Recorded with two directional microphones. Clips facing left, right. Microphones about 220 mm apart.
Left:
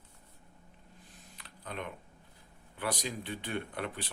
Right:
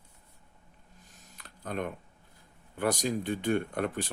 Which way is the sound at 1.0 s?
45° right (ahead or behind).